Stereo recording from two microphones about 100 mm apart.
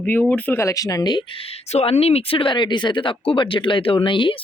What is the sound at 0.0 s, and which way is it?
Speech, 15° left (ahead or behind).